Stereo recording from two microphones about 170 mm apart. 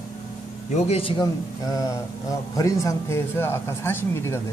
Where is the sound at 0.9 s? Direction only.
30° left (ahead or behind).